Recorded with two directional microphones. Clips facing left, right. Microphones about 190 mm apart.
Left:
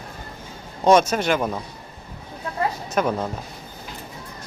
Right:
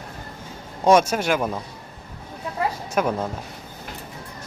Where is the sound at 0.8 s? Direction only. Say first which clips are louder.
Even; 10° right (ahead or behind).